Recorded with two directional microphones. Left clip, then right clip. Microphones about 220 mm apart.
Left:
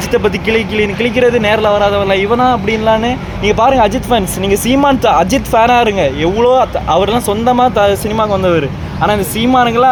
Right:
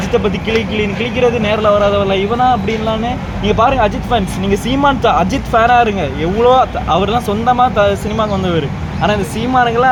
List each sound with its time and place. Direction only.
0.1 s speech: 50° left (ahead or behind)